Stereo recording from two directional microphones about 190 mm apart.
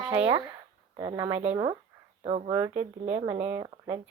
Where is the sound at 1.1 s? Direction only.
15° right (ahead or behind).